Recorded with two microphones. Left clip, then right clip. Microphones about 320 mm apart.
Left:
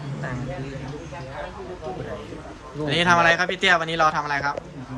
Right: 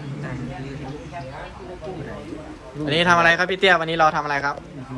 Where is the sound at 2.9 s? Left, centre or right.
Centre.